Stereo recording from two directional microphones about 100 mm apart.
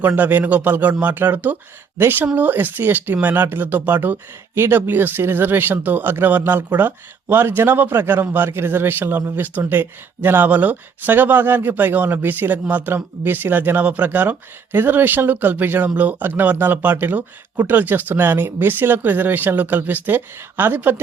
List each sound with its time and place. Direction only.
0.0 s speech: 15° right (ahead or behind)